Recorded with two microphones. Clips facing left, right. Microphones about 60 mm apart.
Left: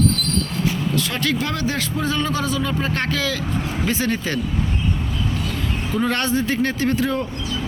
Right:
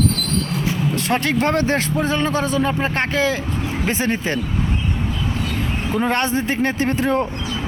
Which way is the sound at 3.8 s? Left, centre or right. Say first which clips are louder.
Right 2 dB; right.